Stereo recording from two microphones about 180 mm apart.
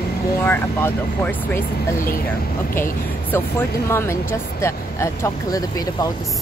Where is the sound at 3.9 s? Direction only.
15° left (ahead or behind).